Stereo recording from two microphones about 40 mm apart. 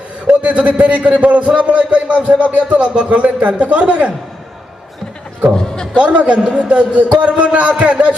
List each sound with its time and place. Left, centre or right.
0.3 s a man's voice: right
5.5 s a sound: centre
6.0 s a man's voice: right